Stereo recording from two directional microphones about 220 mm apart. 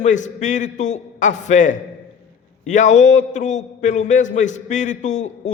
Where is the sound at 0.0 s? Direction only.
30° left (ahead or behind).